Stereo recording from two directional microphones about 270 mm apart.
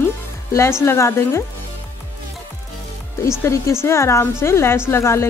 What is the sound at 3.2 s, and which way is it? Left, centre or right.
Speech, centre.